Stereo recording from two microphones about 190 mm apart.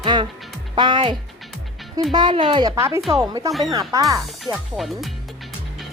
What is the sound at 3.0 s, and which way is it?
Speech, centre (ahead or behind).